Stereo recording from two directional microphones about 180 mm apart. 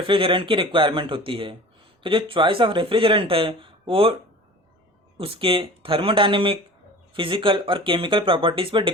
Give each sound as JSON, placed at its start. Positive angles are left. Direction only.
{"t": 0.1, "sound": "speech", "side_deg": -30}
{"t": 5.2, "sound": "speech", "side_deg": -30}